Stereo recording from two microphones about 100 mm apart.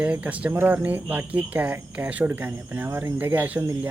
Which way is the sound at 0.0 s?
15° right (ahead or behind).